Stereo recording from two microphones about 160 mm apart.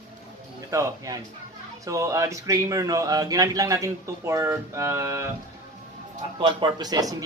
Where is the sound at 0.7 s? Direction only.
20° right (ahead or behind).